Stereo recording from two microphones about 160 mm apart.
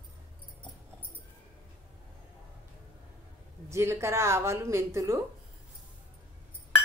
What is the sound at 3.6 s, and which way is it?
Speech, 15° right (ahead or behind).